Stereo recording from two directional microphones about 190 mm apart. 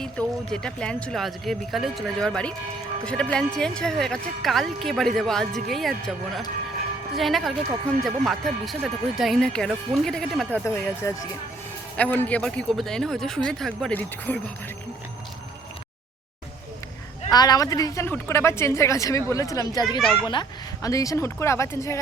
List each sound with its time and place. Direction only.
0.0 s a woman's voice: 5° left (ahead or behind)
17.3 s a woman's voice: 20° left (ahead or behind)